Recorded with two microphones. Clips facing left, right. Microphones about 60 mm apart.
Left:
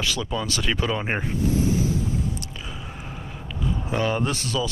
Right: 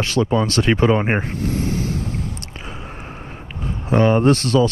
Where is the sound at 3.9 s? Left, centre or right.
Right.